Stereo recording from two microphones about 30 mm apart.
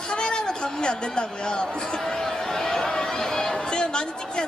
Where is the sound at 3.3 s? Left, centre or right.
Centre.